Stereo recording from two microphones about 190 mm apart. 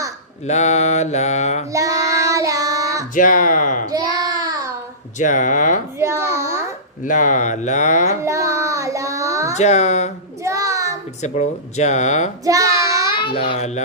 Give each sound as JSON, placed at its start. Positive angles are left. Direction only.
{"t": 0.4, "sound": "mantra", "side_deg": 35}
{"t": 1.7, "sound": "child singing", "side_deg": -15}
{"t": 3.2, "sound": "speech", "side_deg": 45}
{"t": 5.1, "sound": "mantra", "side_deg": 40}
{"t": 6.0, "sound": "a sound", "side_deg": -15}
{"t": 6.4, "sound": "babbling", "side_deg": -15}
{"t": 7.0, "sound": "mantra", "side_deg": 40}
{"t": 8.2, "sound": "child singing", "side_deg": -15}
{"t": 9.6, "sound": "mantra", "side_deg": 35}
{"t": 10.4, "sound": "child singing", "side_deg": -15}
{"t": 11.2, "sound": "mantra", "side_deg": 35}
{"t": 12.5, "sound": "child singing", "side_deg": -15}
{"t": 13.1, "sound": "a child's voice", "side_deg": 25}